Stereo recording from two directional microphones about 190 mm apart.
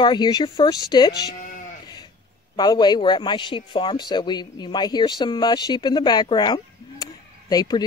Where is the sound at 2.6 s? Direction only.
20° left (ahead or behind).